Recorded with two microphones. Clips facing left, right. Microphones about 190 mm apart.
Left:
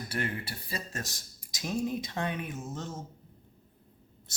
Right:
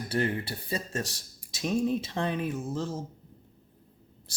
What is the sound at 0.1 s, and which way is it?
Speech, 30° right (ahead or behind).